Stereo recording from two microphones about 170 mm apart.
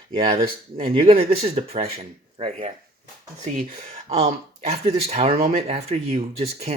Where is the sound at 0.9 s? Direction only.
35° right (ahead or behind).